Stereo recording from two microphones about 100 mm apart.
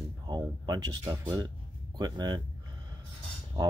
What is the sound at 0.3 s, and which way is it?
Speech, 40° right (ahead or behind).